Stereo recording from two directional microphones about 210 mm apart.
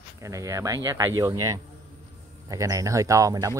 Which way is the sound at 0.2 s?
15° right (ahead or behind).